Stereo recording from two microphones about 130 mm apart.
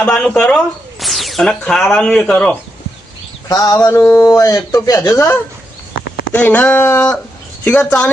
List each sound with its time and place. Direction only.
0.0 s speech: 10° left (ahead or behind)
3.5 s a man's voice: 30° left (ahead or behind); by 8.1 s 10° left (ahead or behind)